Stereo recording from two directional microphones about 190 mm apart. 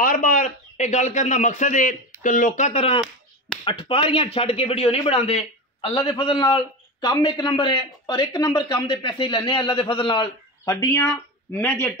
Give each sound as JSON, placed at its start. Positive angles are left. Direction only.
{"t": 0.0, "sound": "a man's voice", "side_deg": 45}